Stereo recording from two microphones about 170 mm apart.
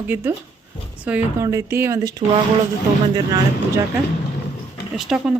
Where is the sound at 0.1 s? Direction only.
10° right (ahead or behind).